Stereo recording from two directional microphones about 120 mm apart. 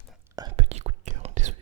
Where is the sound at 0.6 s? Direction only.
65° right (ahead or behind).